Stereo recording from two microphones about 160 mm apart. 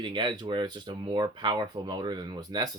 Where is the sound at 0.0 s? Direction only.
30° right (ahead or behind).